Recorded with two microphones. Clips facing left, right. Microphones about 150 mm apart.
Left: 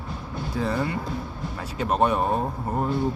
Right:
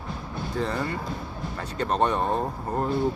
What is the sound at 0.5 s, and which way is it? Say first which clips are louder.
Speech: left 2 dB; 5° left (ahead or behind).